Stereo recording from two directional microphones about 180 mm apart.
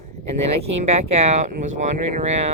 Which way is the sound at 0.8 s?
35° right (ahead or behind).